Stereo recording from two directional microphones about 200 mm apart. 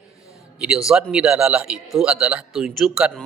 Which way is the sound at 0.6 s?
5° right (ahead or behind).